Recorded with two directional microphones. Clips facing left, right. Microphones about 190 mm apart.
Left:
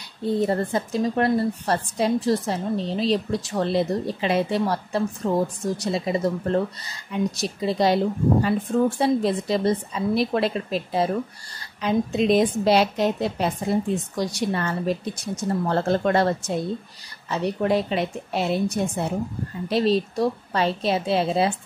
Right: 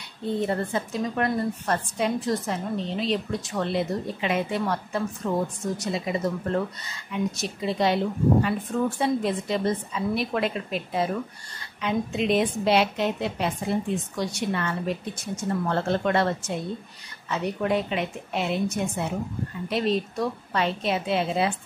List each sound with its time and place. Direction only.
0.4 s speech: 35° left (ahead or behind)